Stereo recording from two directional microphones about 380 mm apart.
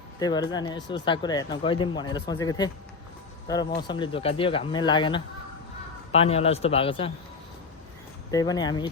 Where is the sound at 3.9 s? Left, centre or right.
Centre.